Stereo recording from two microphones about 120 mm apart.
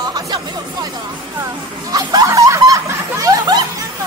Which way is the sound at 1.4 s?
30° right (ahead or behind).